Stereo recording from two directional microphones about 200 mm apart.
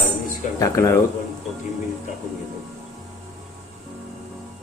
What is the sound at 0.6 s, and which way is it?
Speech, 15° left (ahead or behind).